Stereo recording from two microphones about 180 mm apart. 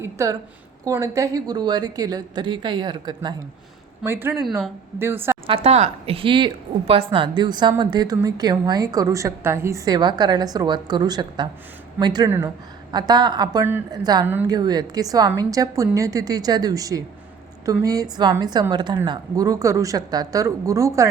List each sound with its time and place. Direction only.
0.0 s a woman's voice: 15° right (ahead or behind)
4.0 s a woman's voice: 10° right (ahead or behind)
5.5 s a woman's voice: 35° right (ahead or behind); by 21.1 s 15° right (ahead or behind)